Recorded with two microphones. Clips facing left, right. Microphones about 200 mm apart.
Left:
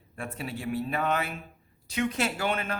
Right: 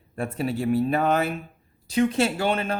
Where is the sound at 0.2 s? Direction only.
40° right (ahead or behind).